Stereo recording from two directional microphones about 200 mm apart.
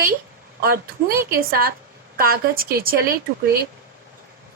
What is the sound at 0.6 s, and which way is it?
A woman's voice, 50° right (ahead or behind).